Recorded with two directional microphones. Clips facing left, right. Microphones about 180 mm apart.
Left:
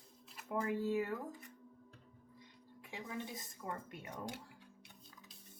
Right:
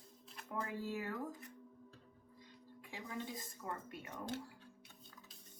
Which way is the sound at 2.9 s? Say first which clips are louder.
Left 1 dB; 20° left (ahead or behind).